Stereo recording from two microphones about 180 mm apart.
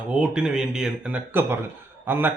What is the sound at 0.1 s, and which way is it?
A man's voice, 5° right (ahead or behind).